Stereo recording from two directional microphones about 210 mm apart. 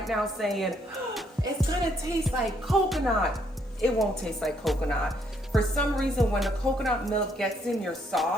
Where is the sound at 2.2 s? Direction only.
Centre (ahead or behind).